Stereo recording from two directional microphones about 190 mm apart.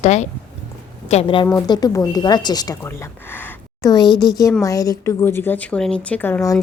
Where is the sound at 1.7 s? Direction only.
20° left (ahead or behind).